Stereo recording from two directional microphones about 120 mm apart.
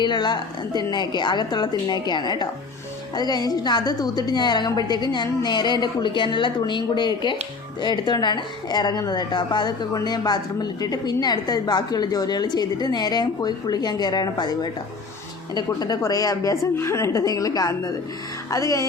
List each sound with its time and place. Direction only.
0.0 s a woman's voice: 35° left (ahead or behind)